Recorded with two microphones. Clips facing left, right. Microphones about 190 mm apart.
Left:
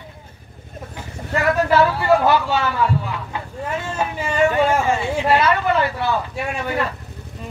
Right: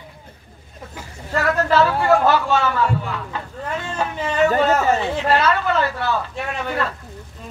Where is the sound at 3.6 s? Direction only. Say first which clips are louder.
Left 1 dB; 10° left (ahead or behind).